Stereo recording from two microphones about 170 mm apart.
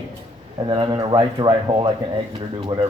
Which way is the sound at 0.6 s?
25° right (ahead or behind).